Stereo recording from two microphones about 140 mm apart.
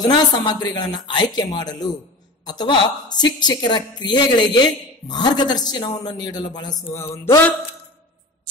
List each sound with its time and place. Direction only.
0.0 s a woman's voice: 30° left (ahead or behind)